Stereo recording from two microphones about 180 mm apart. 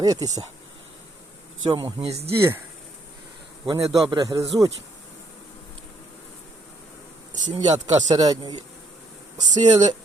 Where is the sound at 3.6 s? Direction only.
20° right (ahead or behind).